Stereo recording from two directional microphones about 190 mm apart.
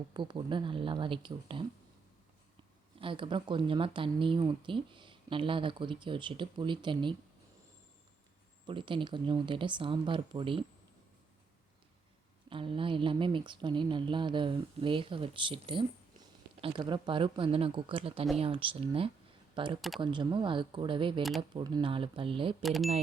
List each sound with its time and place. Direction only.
0.1 s speech: 25° right (ahead or behind)
3.0 s speech: 25° right (ahead or behind)
8.6 s speech: 25° right (ahead or behind)
12.5 s speech: 25° right (ahead or behind)
22.6 s speech: centre (ahead or behind)